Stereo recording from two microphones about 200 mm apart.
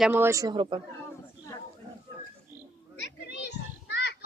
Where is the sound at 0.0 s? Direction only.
10° right (ahead or behind).